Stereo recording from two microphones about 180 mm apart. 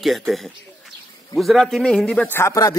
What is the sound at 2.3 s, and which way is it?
Speech, 15° left (ahead or behind).